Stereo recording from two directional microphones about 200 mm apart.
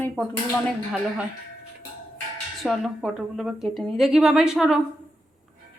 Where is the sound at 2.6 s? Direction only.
Centre (ahead or behind).